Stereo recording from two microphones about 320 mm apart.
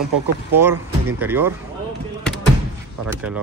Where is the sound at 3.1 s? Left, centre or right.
Centre.